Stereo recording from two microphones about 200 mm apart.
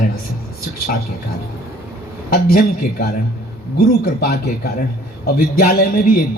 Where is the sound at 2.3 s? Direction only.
50° left (ahead or behind).